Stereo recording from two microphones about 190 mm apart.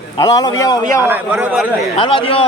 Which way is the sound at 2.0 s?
25° left (ahead or behind).